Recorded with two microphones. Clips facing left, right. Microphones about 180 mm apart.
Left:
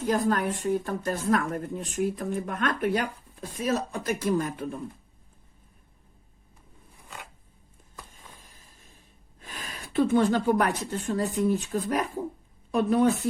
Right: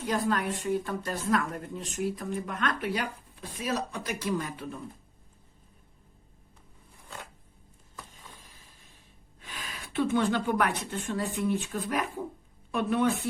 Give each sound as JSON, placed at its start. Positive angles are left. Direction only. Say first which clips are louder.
{"t": 0.0, "sound": "a woman's voice", "louder": "left 4 dB", "side_deg": 45}
{"t": 8.4, "sound": "a sound", "louder": "even", "side_deg": 45}
{"t": 9.4, "sound": "a woman's voice", "louder": "left 2 dB", "side_deg": 45}